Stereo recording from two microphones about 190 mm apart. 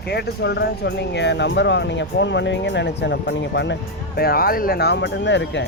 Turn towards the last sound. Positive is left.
turn(degrees=70)  # may be behind; listen again after turning